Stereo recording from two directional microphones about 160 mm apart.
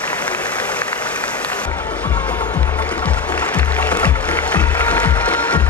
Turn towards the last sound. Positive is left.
turn(degrees=10)  # may be behind; listen again after turning